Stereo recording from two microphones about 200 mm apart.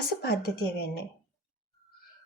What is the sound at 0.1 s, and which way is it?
Speech, 50° left (ahead or behind).